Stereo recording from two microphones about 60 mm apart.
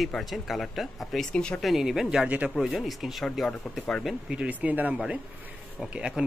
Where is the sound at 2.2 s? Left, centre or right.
Centre.